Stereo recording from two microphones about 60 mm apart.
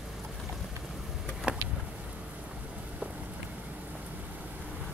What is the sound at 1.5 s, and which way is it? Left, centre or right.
Vehicle, centre.